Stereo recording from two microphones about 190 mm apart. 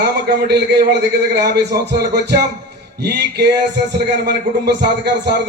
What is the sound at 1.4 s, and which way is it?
A man's voice, 60° right (ahead or behind).